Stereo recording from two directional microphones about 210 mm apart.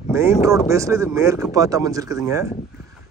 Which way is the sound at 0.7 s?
15° right (ahead or behind).